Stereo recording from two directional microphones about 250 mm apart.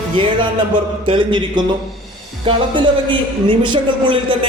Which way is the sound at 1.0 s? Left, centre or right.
Centre.